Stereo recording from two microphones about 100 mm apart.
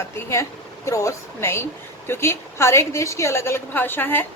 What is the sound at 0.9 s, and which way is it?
A woman's voice, 30° left (ahead or behind).